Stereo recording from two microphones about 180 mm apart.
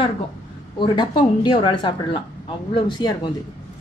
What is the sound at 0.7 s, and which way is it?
Speech, 25° left (ahead or behind).